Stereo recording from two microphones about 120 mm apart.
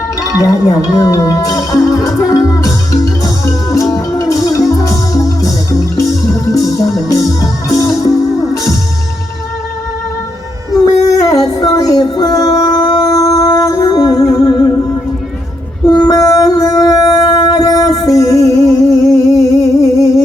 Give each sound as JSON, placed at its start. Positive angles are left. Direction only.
{"t": 0.3, "sound": "music", "side_deg": 30}
{"t": 10.8, "sound": "a sound", "side_deg": 30}
{"t": 12.8, "sound": "howl", "side_deg": 35}
{"t": 13.1, "sound": "music", "side_deg": 25}
{"t": 15.9, "sound": "music", "side_deg": 35}
{"t": 19.1, "sound": "humming", "side_deg": 25}